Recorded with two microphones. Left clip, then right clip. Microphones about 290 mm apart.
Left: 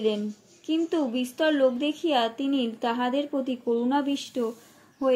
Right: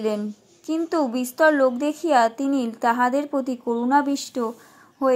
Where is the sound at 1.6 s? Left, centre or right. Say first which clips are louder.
Right 3 dB; centre.